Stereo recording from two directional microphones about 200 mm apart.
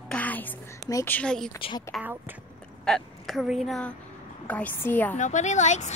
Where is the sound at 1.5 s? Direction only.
25° left (ahead or behind).